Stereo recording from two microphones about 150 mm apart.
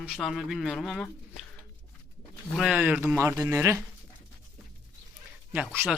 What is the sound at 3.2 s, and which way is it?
Speech, 15° right (ahead or behind).